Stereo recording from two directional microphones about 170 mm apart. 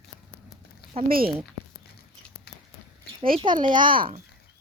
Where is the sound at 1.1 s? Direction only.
60° right (ahead or behind).